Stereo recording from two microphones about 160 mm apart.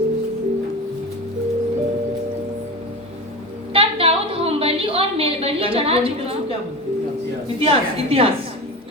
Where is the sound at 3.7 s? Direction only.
35° right (ahead or behind).